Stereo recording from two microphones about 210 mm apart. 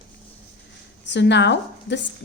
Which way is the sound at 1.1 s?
55° left (ahead or behind).